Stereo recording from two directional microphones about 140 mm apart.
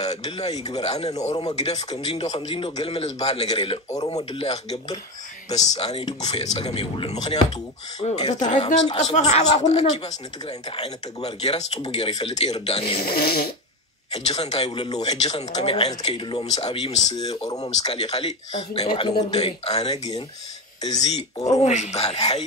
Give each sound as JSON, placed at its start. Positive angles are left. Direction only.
{"t": 0.0, "sound": "speech", "side_deg": 50}
{"t": 2.2, "sound": "a man's voice", "side_deg": 35}
{"t": 11.8, "sound": "speech", "side_deg": 40}
{"t": 13.0, "sound": "speech", "side_deg": 90}
{"t": 14.4, "sound": "speech", "side_deg": 50}
{"t": 14.7, "sound": "speech", "side_deg": 30}
{"t": 15.0, "sound": "a man's voice", "side_deg": 50}
{"t": 16.4, "sound": "speech", "side_deg": 50}
{"t": 17.1, "sound": "speech", "side_deg": 30}
{"t": 17.6, "sound": "a man's voice", "side_deg": 50}
{"t": 19.3, "sound": "speech", "side_deg": 50}
{"t": 20.8, "sound": "speech", "side_deg": 30}
{"t": 21.5, "sound": "speech", "side_deg": 55}